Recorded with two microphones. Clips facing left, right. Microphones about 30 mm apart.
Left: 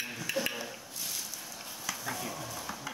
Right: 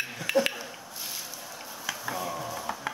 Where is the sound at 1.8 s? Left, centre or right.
Centre.